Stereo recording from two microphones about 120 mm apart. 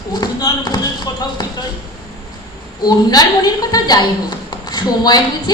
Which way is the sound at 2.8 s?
30° left (ahead or behind).